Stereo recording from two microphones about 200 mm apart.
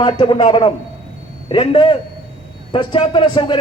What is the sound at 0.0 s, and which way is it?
A man's voice, 25° left (ahead or behind).